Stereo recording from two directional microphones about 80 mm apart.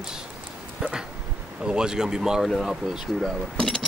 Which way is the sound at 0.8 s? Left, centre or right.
Centre.